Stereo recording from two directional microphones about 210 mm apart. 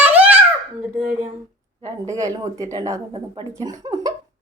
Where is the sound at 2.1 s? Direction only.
15° right (ahead or behind).